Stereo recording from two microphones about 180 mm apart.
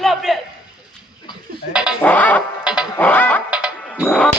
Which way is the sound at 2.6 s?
5° right (ahead or behind).